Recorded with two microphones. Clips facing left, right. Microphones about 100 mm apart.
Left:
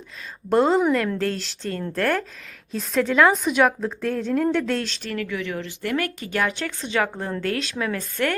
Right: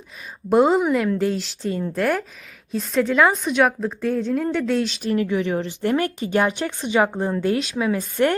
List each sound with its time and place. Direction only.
0.5 s a woman's voice: 5° right (ahead or behind)
5.0 s speech: 25° right (ahead or behind)